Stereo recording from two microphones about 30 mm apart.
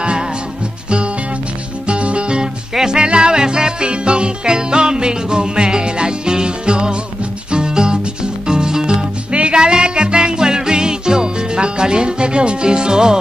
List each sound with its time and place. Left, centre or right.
1.9 s music: right